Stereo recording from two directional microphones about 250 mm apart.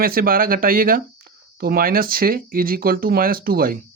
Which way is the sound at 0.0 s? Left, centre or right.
Right.